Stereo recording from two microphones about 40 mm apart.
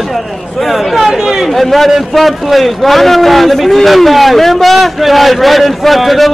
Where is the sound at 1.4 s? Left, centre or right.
Centre.